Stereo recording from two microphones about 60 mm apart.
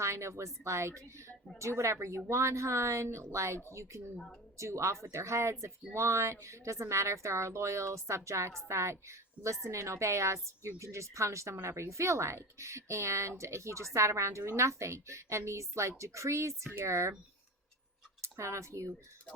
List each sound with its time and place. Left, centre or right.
0.0 s a woman's voice: right
18.2 s speech: right